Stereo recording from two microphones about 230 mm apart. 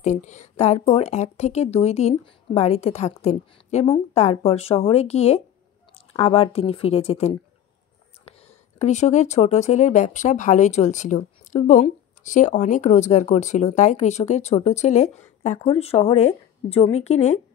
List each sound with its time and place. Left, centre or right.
0.0 s a woman's voice: left